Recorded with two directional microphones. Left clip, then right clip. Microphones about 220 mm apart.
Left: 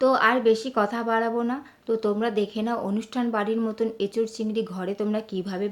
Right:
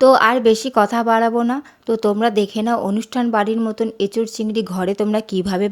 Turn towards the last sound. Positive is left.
turn(degrees=-40)  # may be behind; listen again after turning